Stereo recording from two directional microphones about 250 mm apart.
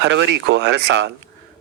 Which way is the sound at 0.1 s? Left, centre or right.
Right.